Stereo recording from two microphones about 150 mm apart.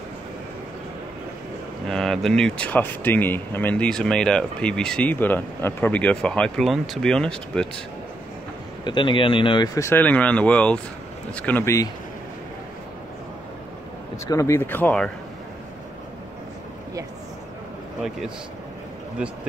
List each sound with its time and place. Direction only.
1.9 s speech: 5° left (ahead or behind)
8.8 s speech: 35° left (ahead or behind)
9.8 s speech: 15° left (ahead or behind)
14.1 s speech: 20° left (ahead or behind)